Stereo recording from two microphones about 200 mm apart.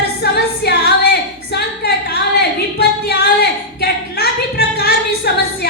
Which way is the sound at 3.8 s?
50° left (ahead or behind).